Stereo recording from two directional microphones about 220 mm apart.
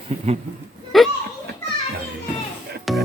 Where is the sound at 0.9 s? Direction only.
Centre (ahead or behind).